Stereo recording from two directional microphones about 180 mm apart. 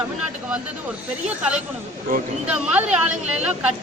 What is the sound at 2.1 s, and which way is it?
Speech, 55° right (ahead or behind).